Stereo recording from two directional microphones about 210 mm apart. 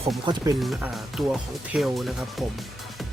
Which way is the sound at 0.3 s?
20° right (ahead or behind).